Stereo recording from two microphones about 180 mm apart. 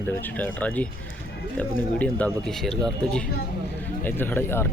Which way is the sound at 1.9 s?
5° left (ahead or behind).